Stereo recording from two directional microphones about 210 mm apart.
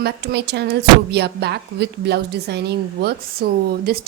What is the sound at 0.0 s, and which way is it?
Speech, 50° right (ahead or behind).